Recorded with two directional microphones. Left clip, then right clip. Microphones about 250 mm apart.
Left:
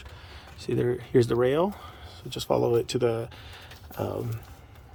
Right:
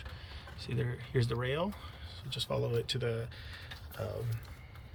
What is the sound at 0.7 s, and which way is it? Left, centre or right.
Speech, left.